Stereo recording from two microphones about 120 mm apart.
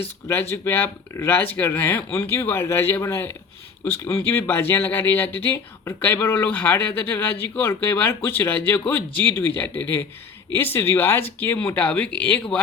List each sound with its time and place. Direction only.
0.5 s speech: 20° left (ahead or behind)